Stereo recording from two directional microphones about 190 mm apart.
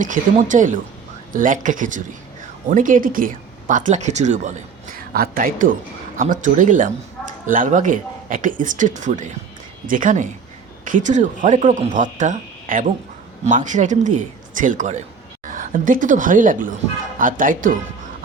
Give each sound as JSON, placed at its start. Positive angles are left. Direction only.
{"t": 0.0, "sound": "speech", "side_deg": -40}
{"t": 4.9, "sound": "a woman's voice", "side_deg": -50}